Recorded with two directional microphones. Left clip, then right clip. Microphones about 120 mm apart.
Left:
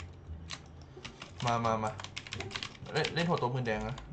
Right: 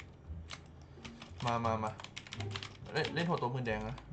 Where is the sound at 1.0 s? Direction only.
10° left (ahead or behind).